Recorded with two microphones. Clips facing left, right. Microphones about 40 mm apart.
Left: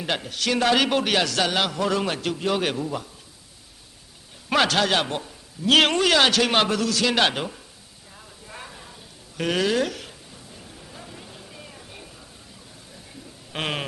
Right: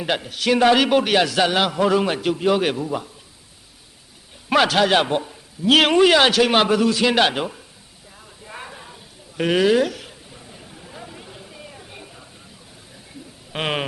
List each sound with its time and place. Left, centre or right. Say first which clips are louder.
0.0 s a man's voice: right 4 dB; centre
4.4 s a man's voice: right 4 dB; centre
8.4 s a sound: right 4 dB; centre
9.4 s speech: right 5 dB; centre
10.3 s a sound: right 2 dB; centre
13.5 s a man's voice: right 4 dB; centre